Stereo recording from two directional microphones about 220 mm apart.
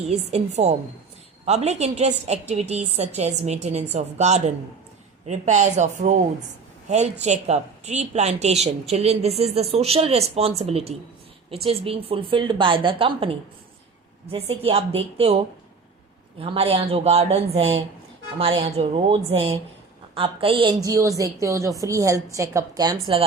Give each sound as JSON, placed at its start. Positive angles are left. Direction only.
{"t": 0.1, "sound": "a woman's voice", "side_deg": -30}
{"t": 16.4, "sound": "a woman's voice", "side_deg": -25}